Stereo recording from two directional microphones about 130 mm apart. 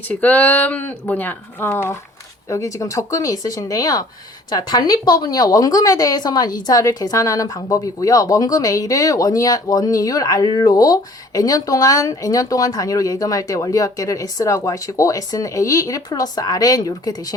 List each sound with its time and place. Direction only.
0.1 s a woman's voice: 10° left (ahead or behind); by 17.2 s 30° left (ahead or behind)